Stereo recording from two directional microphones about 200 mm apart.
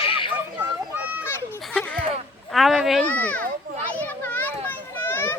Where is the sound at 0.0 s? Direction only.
25° left (ahead or behind).